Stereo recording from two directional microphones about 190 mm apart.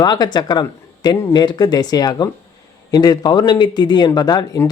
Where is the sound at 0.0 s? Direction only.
20° left (ahead or behind).